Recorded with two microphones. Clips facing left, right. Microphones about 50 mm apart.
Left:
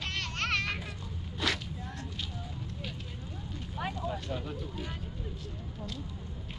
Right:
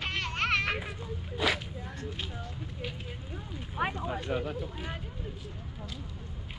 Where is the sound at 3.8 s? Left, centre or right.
Right.